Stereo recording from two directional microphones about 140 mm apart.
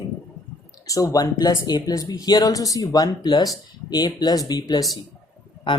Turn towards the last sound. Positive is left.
turn(degrees=35)  # may be behind; listen again after turning